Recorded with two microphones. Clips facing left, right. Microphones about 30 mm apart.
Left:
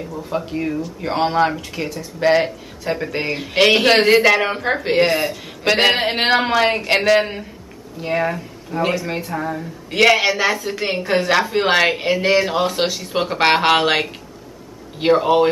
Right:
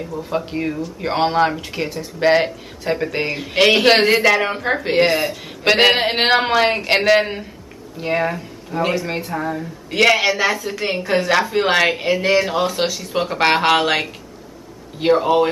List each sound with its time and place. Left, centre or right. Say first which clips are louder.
0.5 s a man's voice: even; centre